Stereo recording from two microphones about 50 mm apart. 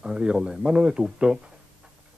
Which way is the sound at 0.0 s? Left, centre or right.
Centre.